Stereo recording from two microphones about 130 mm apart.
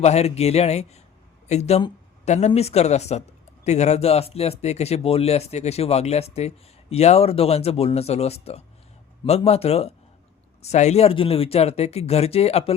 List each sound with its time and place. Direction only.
0.0 s speech: 55° left (ahead or behind)